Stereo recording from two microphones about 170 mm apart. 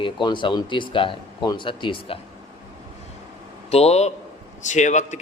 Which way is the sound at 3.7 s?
40° left (ahead or behind).